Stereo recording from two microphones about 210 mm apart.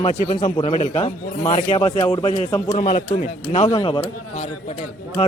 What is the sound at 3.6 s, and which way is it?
Speech, 20° left (ahead or behind).